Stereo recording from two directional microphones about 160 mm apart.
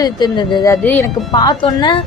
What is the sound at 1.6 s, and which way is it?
Speech, 30° left (ahead or behind).